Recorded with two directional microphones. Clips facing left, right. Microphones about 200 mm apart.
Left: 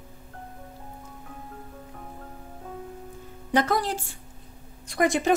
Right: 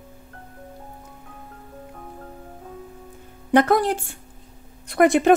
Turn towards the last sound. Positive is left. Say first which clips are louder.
# right 7 dB
turn(degrees=-60)  # may be behind; listen again after turning